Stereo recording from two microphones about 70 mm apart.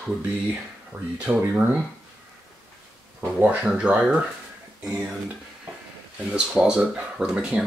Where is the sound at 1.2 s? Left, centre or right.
Right.